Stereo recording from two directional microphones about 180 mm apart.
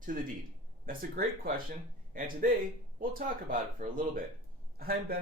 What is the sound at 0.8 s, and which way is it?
Speech, 50° right (ahead or behind).